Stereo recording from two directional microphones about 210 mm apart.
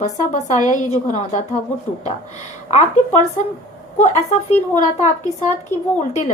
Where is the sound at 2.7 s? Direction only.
30° left (ahead or behind).